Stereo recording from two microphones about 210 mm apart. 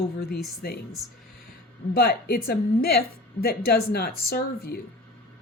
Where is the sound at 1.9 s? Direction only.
45° left (ahead or behind).